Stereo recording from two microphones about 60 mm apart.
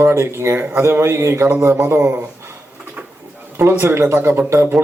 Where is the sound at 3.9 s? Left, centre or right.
Right.